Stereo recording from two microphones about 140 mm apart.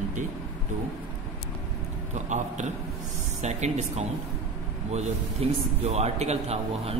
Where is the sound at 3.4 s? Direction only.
55° right (ahead or behind).